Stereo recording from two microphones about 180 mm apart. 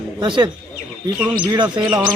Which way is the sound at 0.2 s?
25° right (ahead or behind).